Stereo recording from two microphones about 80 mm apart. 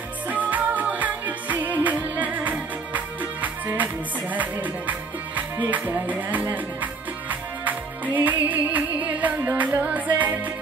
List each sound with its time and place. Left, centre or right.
0.3 s music: right